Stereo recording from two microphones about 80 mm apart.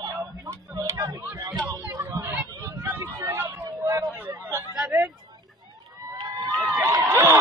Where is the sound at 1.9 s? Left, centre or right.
Right.